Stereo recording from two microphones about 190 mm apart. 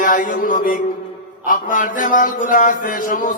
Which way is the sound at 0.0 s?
45° left (ahead or behind).